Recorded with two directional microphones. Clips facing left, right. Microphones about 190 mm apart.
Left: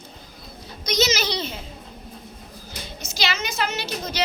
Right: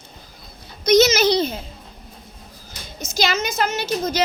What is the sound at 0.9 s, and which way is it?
Speech, 50° right (ahead or behind).